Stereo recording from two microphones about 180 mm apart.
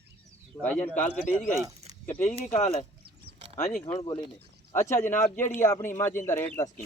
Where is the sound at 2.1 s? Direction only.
40° left (ahead or behind).